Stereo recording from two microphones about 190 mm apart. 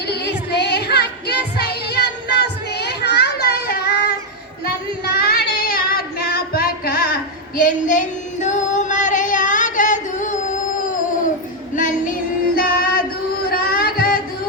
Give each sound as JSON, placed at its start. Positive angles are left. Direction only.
{"t": 0.1, "sound": "music", "side_deg": 60}
{"t": 4.6, "sound": "child singing", "side_deg": 55}
{"t": 11.8, "sound": "child singing", "side_deg": 45}
{"t": 12.5, "sound": "music", "side_deg": 50}
{"t": 13.5, "sound": "a sound", "side_deg": 50}